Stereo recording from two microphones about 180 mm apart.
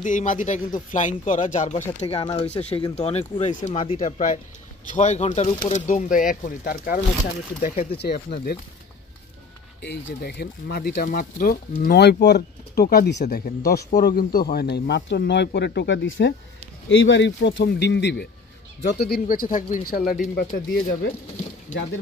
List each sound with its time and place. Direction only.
0.0 s speech: 45° left (ahead or behind)
2.0 s speech: 30° left (ahead or behind)
4.0 s speech: 45° left (ahead or behind)
7.6 s speech: 40° left (ahead or behind)
8.0 s speech: 65° left (ahead or behind)
9.8 s speech: 70° left (ahead or behind)